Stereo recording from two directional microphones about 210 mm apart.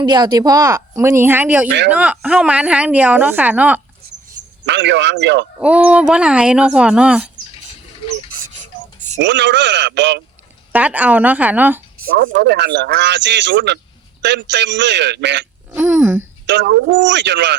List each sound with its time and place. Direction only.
0.0 s a woman's voice: 20° right (ahead or behind)
4.6 s speech: 60° right (ahead or behind)
5.5 s speech: 5° right (ahead or behind)
9.1 s speech: 55° right (ahead or behind)
10.7 s a woman's voice: 5° right (ahead or behind)
12.1 s speech: 45° right (ahead or behind)
15.7 s a woman's voice: 5° right (ahead or behind)
16.5 s speech: 55° right (ahead or behind)